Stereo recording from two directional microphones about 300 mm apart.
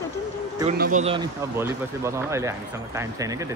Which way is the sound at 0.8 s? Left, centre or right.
Right.